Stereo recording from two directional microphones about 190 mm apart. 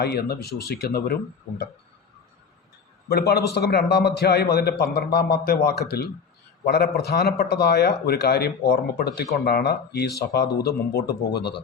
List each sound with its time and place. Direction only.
0.0 s a man's voice: 55° left (ahead or behind)
3.1 s a man's voice: 60° left (ahead or behind)